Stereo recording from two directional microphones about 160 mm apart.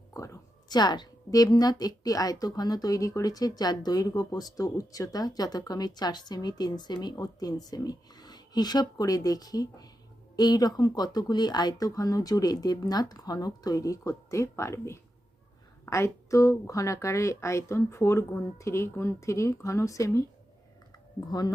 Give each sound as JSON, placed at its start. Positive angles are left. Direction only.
{"t": 0.1, "sound": "a woman's voice", "side_deg": 20}
{"t": 21.2, "sound": "a woman's voice", "side_deg": 25}